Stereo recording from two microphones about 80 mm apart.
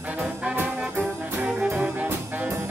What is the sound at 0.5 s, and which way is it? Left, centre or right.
Music, right.